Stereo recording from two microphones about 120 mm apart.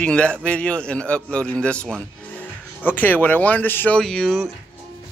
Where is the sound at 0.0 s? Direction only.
10° left (ahead or behind).